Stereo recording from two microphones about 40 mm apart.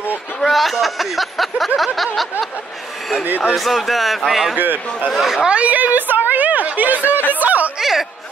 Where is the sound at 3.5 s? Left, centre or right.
Centre.